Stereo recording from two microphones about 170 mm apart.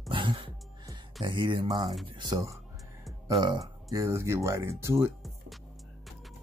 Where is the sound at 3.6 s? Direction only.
20° right (ahead or behind).